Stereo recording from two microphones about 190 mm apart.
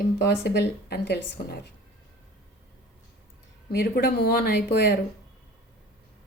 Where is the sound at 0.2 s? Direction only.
60° left (ahead or behind).